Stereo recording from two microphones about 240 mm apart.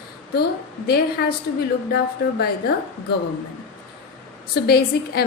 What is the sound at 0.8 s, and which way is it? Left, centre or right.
A woman's voice, left.